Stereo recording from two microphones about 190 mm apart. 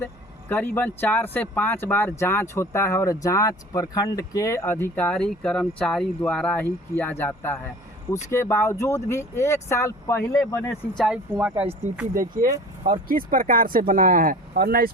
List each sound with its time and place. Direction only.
0.0 s speech: 10° left (ahead or behind); by 11.7 s 10° right (ahead or behind)
12.1 s speech: 45° right (ahead or behind)